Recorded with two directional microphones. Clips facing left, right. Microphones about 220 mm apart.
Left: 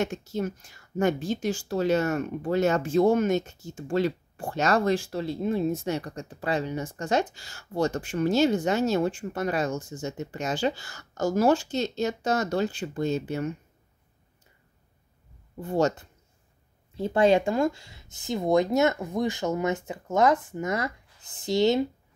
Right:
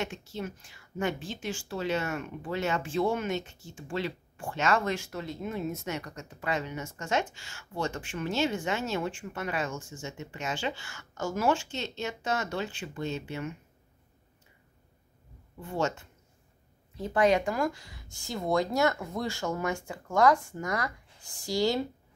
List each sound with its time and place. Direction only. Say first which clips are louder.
0.0 s a woman's voice: left 7 dB; 45° left (ahead or behind)
15.5 s a woman's voice: left 6 dB; 40° left (ahead or behind); by 21.8 s 20° left (ahead or behind)